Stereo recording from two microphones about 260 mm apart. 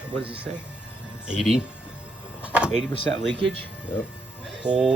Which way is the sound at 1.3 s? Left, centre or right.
Centre.